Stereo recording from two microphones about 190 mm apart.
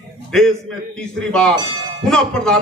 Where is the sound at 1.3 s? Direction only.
5° left (ahead or behind).